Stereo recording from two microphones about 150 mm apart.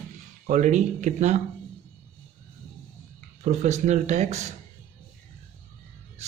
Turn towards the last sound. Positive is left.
turn(degrees=-50)  # may be behind; listen again after turning